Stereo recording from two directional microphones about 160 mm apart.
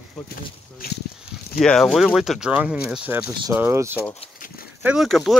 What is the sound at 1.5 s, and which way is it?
Speech, 5° left (ahead or behind).